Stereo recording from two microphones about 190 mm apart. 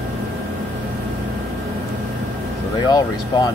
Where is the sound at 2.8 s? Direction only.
20° left (ahead or behind).